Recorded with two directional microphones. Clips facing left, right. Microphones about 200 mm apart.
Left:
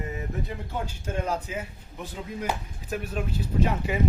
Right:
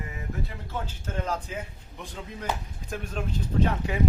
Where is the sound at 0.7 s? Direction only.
10° left (ahead or behind).